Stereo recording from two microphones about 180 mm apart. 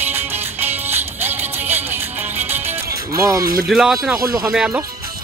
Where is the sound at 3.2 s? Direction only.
20° right (ahead or behind).